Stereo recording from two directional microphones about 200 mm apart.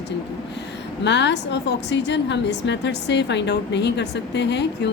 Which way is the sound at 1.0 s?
60° left (ahead or behind).